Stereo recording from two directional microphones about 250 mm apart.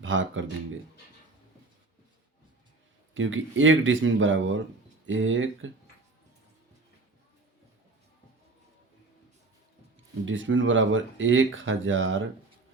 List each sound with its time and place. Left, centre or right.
0.0 s speech: right
3.2 s speech: right
10.2 s speech: right